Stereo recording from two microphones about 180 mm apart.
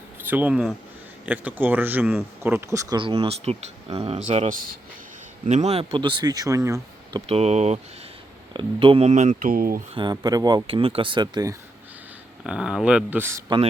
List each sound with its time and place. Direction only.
0.2 s speech: 10° right (ahead or behind)
3.0 s speech: 30° right (ahead or behind)
7.3 s speech: 35° right (ahead or behind); by 9.8 s 50° right (ahead or behind)
9.9 s speech: 25° right (ahead or behind)
12.5 s speech: 5° right (ahead or behind)